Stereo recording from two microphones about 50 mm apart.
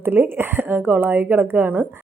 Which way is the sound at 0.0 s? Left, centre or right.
Right.